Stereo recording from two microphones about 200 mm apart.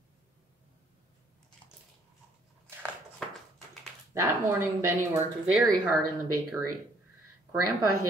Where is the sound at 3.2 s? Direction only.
5° left (ahead or behind).